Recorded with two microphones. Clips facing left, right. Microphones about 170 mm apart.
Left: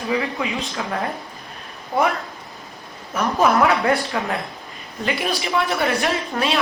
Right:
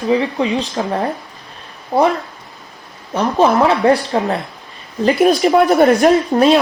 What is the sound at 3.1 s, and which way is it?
Speech, 30° right (ahead or behind).